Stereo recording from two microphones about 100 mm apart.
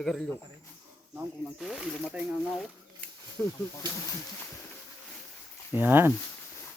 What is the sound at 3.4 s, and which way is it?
Speech, 15° left (ahead or behind).